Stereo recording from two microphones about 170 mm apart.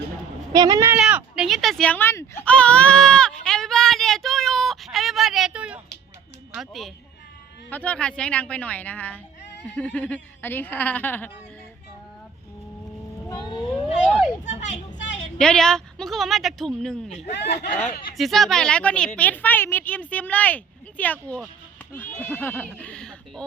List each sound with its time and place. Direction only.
0.5 s speech: 20° right (ahead or behind)
0.9 s speech: 5° right (ahead or behind)
3.4 s a sound: 5° left (ahead or behind)
6.5 s a woman's voice: centre (ahead or behind)
13.2 s music: 25° left (ahead or behind)
13.7 s a sound: centre (ahead or behind)
14.4 s a child's voice: 45° left (ahead or behind)
15.4 s speech: 5° left (ahead or behind)
17.3 s speech: 75° left (ahead or behind)
18.2 s a woman's voice: centre (ahead or behind)